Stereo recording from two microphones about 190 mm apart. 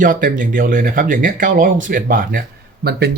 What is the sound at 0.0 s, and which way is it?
Speech, 45° right (ahead or behind).